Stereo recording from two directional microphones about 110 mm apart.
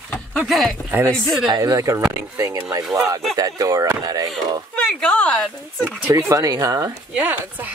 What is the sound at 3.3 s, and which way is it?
Speech, 35° right (ahead or behind).